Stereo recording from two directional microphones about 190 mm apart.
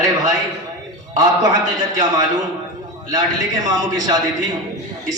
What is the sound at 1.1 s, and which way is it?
Speech, 20° right (ahead or behind).